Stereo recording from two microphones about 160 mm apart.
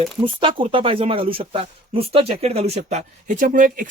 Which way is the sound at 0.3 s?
30° right (ahead or behind).